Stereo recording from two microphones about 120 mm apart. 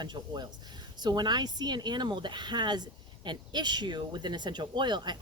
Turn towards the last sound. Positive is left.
turn(degrees=-40)  # may be behind; listen again after turning